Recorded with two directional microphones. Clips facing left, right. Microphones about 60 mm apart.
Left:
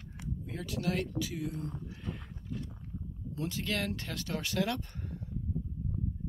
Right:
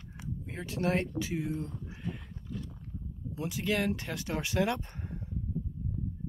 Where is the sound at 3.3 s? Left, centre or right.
Centre.